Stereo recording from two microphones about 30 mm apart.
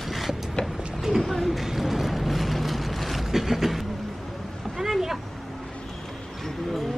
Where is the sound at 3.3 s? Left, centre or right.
Centre.